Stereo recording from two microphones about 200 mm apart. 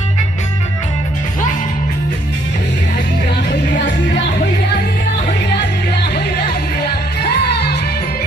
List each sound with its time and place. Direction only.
3.8 s music: 60° left (ahead or behind)
7.2 s music: 55° left (ahead or behind)